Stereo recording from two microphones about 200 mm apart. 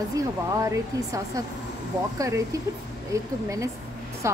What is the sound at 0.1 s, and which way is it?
A woman's voice, 15° right (ahead or behind).